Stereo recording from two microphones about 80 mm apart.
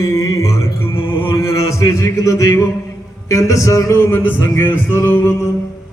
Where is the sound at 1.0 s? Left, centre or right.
Left.